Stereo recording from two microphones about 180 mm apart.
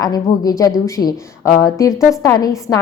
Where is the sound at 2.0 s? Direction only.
15° left (ahead or behind).